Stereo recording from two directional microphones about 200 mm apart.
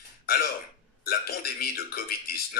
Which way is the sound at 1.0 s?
50° left (ahead or behind).